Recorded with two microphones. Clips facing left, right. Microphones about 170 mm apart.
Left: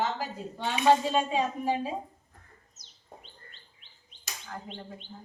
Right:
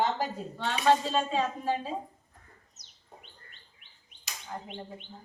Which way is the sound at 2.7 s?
30° left (ahead or behind).